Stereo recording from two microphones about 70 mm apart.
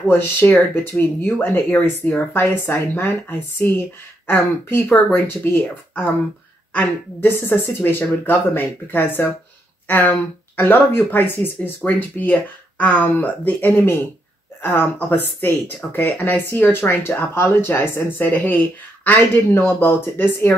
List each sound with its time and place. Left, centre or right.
0.1 s speech: left